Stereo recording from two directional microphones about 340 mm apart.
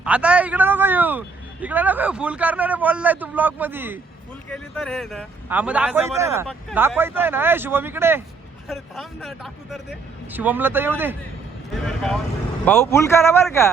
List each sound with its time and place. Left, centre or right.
0.0 s a man's voice: centre
12.6 s speech: centre